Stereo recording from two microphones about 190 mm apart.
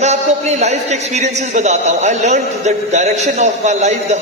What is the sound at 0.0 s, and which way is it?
A man's voice, 35° right (ahead or behind).